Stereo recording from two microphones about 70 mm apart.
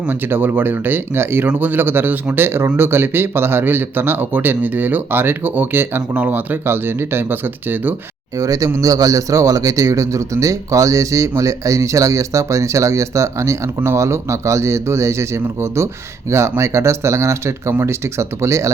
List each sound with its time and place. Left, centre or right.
0.1 s speech: right
8.4 s speech: right